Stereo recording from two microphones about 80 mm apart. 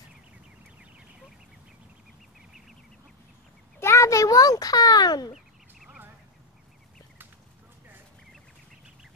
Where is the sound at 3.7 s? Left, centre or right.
Left.